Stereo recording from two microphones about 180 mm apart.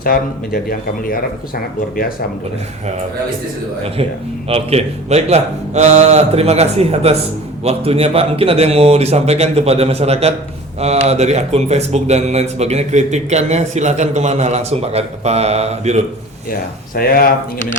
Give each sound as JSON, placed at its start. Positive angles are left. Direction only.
{"t": 0.0, "sound": "speech", "side_deg": 55}
{"t": 4.4, "sound": "speech", "side_deg": -35}
{"t": 16.5, "sound": "speech", "side_deg": 55}